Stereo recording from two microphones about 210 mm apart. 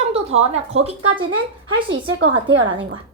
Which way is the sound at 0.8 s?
30° right (ahead or behind).